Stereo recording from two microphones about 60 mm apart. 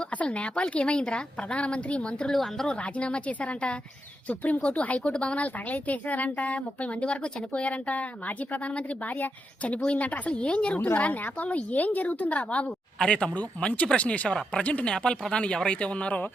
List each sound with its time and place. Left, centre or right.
0.2 s speech: centre
2.3 s speech: centre
2.6 s speech: centre